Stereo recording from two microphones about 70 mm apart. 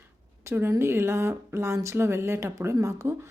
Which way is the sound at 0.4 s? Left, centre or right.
Right.